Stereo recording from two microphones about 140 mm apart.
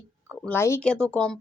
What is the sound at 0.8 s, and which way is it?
Speech, 5° left (ahead or behind).